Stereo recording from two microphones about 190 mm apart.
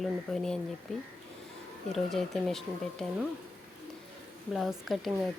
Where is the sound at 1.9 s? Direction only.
Centre (ahead or behind).